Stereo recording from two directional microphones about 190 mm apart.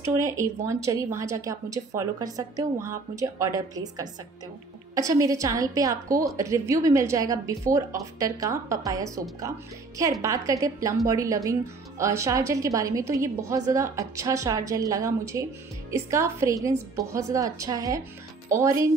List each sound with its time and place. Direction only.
0.0 s speech: 15° right (ahead or behind)
10.2 s speech: 15° right (ahead or behind)